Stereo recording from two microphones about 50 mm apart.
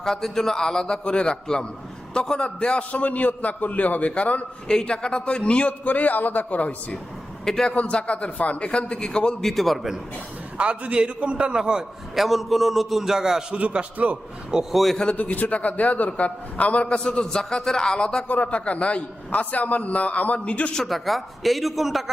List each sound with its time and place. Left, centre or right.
0.0 s a man's voice: centre; by 4.4 s left
4.7 s a man's voice: centre; by 6.7 s left
7.4 s a man's voice: centre
7.7 s a man's voice: left
9.4 s speech: centre
10.6 s a man's voice: right
12.2 s speech: centre
13.5 s a man's voice: right
14.5 s a man's voice: centre
15.1 s a man's voice: left
17.0 s a man's voice: centre
18.3 s a man's voice: left
20.8 s speech: centre